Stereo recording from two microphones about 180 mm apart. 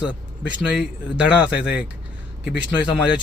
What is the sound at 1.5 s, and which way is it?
Speech, 70° left (ahead or behind).